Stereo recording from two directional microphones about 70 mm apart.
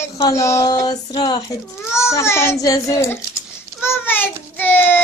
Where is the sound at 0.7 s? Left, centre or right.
Left.